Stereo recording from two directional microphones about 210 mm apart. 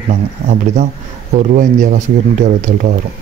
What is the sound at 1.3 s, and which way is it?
Speech, 35° right (ahead or behind).